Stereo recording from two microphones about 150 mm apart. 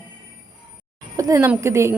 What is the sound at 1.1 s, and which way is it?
Speech, 20° right (ahead or behind).